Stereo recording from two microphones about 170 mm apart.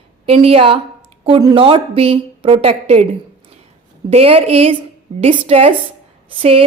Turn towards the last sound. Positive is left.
turn(degrees=-35)  # may be behind; listen again after turning